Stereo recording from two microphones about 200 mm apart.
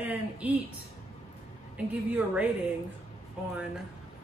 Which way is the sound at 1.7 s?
5° right (ahead or behind).